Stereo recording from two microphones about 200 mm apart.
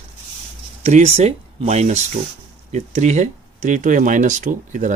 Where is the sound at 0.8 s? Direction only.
35° right (ahead or behind).